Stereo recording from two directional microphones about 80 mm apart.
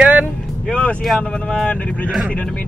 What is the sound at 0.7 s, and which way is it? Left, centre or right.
Speech, centre.